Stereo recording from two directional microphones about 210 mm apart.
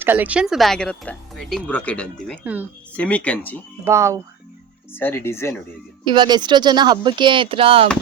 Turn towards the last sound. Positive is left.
turn(degrees=-25)  # may be behind; listen again after turning